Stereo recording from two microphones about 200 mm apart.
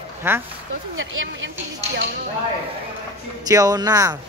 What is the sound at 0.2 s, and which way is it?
Speech, 10° right (ahead or behind).